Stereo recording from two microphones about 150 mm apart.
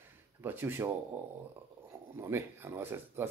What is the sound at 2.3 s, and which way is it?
Speech, 15° right (ahead or behind).